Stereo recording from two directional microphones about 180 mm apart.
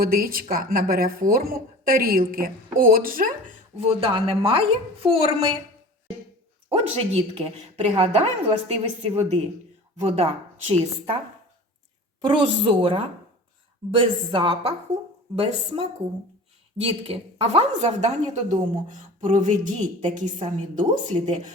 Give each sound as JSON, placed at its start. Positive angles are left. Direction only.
{"t": 0.0, "sound": "a woman's voice", "side_deg": -55}
{"t": 3.8, "sound": "a woman's voice", "side_deg": -35}
{"t": 6.7, "sound": "a woman's voice", "side_deg": -35}
{"t": 12.2, "sound": "a woman's voice", "side_deg": -30}